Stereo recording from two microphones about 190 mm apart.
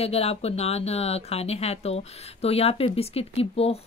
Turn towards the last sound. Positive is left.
turn(degrees=30)  # may be behind; listen again after turning